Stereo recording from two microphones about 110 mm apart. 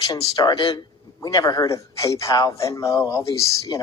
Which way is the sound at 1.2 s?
30° left (ahead or behind).